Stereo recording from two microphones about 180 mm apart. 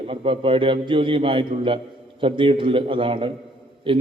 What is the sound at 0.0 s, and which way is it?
A man's voice, 30° right (ahead or behind).